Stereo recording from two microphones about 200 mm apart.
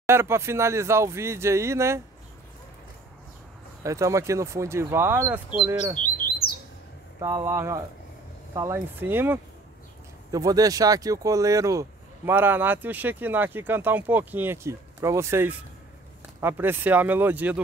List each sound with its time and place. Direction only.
0.1 s speech: 10° right (ahead or behind)
3.8 s speech: 15° right (ahead or behind)
5.9 s bird: 45° left (ahead or behind)
7.2 s speech: 15° right (ahead or behind)